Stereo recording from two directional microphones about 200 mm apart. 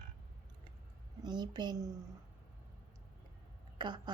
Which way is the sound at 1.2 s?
20° right (ahead or behind).